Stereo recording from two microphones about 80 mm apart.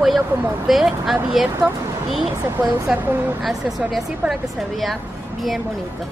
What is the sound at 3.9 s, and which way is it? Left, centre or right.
A woman's voice, centre.